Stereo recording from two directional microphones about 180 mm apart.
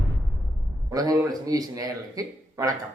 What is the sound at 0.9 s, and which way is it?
A man's voice, 20° right (ahead or behind).